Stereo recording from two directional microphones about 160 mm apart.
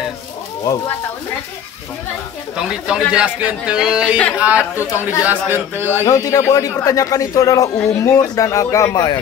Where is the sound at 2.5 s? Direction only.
5° right (ahead or behind).